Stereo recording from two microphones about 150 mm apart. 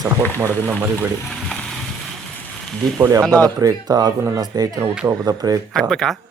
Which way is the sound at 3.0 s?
20° right (ahead or behind).